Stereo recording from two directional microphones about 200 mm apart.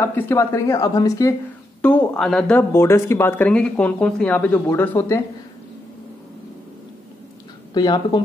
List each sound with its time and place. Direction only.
0.0 s speech: 10° left (ahead or behind)
7.7 s speech: 20° left (ahead or behind)